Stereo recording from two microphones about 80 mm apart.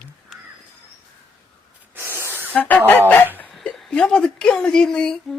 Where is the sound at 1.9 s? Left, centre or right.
Right.